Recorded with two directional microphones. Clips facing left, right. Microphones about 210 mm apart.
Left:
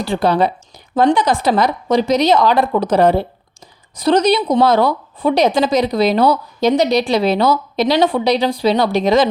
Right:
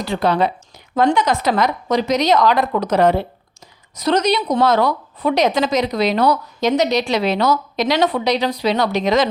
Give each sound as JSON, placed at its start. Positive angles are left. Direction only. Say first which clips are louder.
{"t": 0.0, "sound": "speech", "louder": "left 2 dB", "side_deg": 30}